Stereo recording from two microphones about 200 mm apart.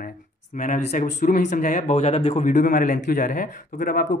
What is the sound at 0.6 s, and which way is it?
Speech, 35° left (ahead or behind).